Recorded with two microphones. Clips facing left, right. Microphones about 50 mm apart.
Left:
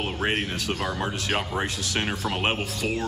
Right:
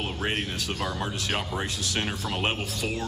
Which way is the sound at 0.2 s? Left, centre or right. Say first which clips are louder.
Left 3 dB; left.